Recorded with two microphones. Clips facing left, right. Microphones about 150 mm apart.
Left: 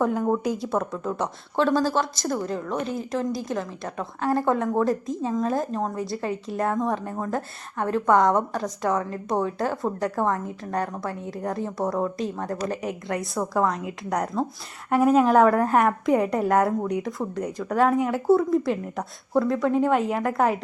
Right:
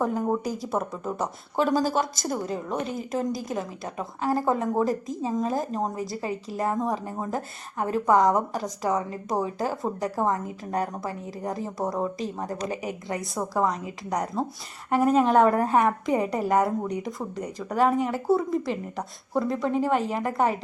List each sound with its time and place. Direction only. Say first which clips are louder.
0.0 s a woman's voice: left 3 dB; 5° right (ahead or behind)
10.7 s speech: even; 15° right (ahead or behind)
11.0 s a woman's voice: left 2 dB; centre (ahead or behind)
18.6 s a woman's voice: left 3 dB; centre (ahead or behind)